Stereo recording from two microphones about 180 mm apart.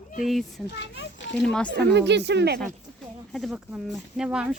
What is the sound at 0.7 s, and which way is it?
Speech, 80° left.